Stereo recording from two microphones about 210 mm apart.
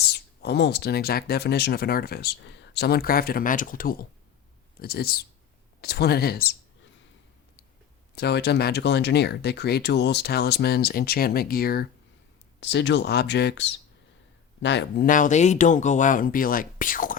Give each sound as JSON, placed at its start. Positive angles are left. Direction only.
{"t": 0.1, "sound": "speech", "side_deg": 50}
{"t": 8.1, "sound": "speech", "side_deg": 50}
{"t": 12.5, "sound": "speech", "side_deg": 55}